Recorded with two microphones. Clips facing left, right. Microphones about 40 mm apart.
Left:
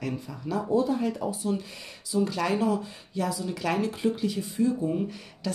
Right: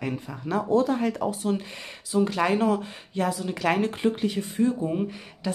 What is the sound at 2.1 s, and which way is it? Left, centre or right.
Speech, right.